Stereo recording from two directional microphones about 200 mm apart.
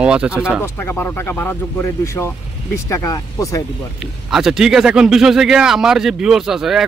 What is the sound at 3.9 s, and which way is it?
A man's voice, centre (ahead or behind).